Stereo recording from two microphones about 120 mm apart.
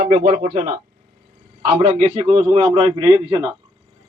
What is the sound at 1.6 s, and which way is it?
A man's voice, 75° right (ahead or behind).